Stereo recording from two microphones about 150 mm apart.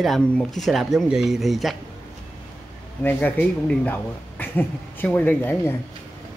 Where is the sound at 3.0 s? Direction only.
10° left (ahead or behind).